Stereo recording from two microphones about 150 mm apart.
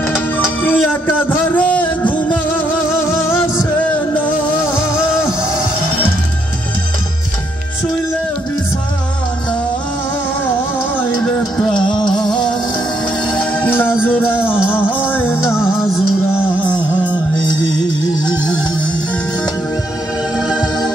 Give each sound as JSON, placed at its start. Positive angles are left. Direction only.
{"t": 0.7, "sound": "music", "side_deg": 10}
{"t": 5.2, "sound": "music", "side_deg": -5}
{"t": 11.0, "sound": "music", "side_deg": 5}
{"t": 14.4, "sound": "music", "side_deg": -10}
{"t": 15.1, "sound": "music", "side_deg": 15}
{"t": 15.6, "sound": "music", "side_deg": 0}
{"t": 16.3, "sound": "music", "side_deg": 15}
{"t": 20.3, "sound": "music", "side_deg": -5}